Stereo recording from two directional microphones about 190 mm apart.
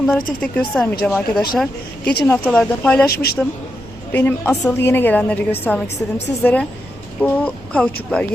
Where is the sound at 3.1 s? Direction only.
55° left (ahead or behind).